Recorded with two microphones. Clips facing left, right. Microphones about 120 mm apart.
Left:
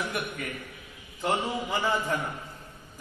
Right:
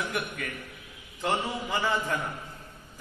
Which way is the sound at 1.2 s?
10° left (ahead or behind).